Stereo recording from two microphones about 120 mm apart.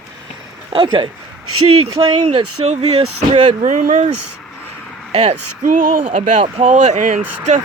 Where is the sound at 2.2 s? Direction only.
70° right (ahead or behind).